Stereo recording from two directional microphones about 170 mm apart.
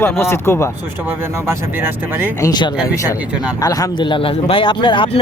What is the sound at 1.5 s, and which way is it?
Speech, 15° right (ahead or behind).